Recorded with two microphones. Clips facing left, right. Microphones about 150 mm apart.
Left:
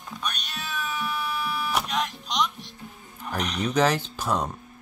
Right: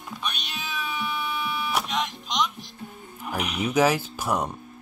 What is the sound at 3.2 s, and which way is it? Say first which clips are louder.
Speech: even; 10° right (ahead or behind).